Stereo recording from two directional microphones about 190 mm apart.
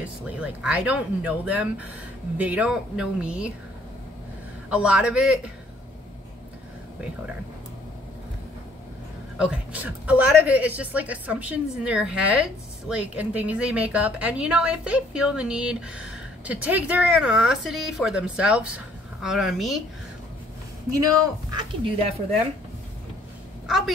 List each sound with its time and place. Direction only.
0.0 s a woman's voice: 5° right (ahead or behind)
4.6 s a man's voice: 5° right (ahead or behind)
9.4 s a woman's voice: 5° right (ahead or behind)
20.9 s speech: 20° right (ahead or behind)